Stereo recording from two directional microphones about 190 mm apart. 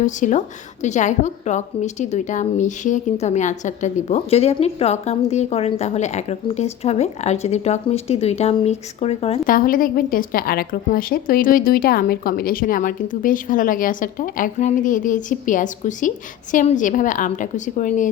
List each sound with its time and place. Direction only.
0.0 s a woman's voice: 40° left (ahead or behind)
9.5 s a woman's voice: 45° left (ahead or behind)